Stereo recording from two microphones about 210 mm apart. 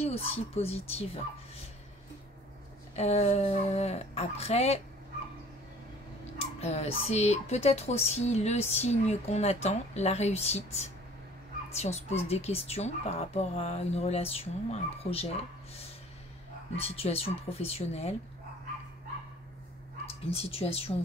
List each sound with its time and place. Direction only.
0.0 s speech: 30° left (ahead or behind)
3.0 s speech: 30° left (ahead or behind)
6.3 s speech: 30° left (ahead or behind)
16.7 s speech: 30° left (ahead or behind)
20.2 s speech: 30° left (ahead or behind)